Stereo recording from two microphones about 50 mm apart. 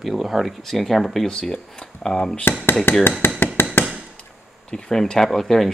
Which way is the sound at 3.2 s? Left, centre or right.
Left.